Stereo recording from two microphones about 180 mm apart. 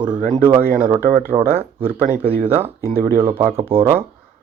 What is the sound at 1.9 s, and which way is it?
Speech, 45° right (ahead or behind).